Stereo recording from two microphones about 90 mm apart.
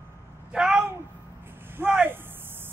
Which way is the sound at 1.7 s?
20° right (ahead or behind).